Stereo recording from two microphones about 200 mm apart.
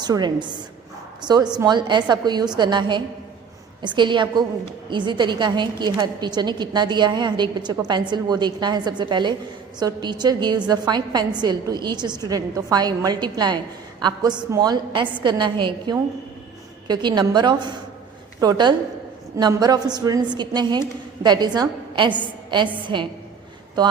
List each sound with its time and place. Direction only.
0.0 s a woman's voice: 20° right (ahead or behind)